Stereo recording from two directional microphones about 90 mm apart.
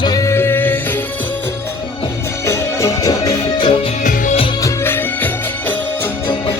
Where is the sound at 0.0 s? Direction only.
45° left (ahead or behind).